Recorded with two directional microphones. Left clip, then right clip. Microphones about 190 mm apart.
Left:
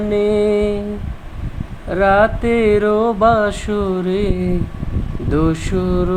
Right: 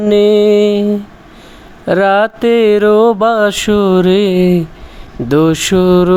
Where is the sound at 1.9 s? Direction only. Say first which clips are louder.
Right 3 dB; 45° right (ahead or behind).